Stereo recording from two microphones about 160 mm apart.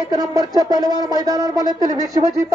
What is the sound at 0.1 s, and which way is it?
A man's voice, 25° right (ahead or behind).